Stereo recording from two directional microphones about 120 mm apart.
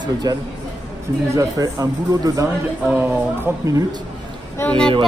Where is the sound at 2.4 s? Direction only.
15° right (ahead or behind).